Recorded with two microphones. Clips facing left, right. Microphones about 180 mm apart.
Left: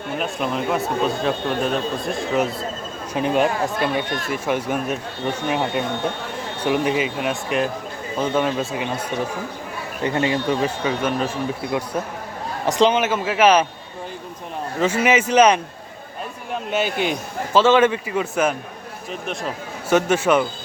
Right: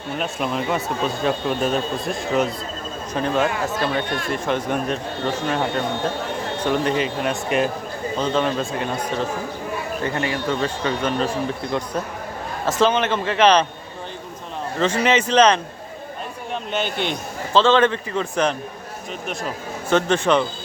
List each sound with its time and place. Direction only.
0.2 s speech: centre (ahead or behind)
3.2 s a man's voice: 15° left (ahead or behind)
10.0 s speech: 20° left (ahead or behind)
10.6 s a man's voice: 5° left (ahead or behind)
14.8 s a man's voice: 10° left (ahead or behind)
19.9 s a man's voice: 10° left (ahead or behind)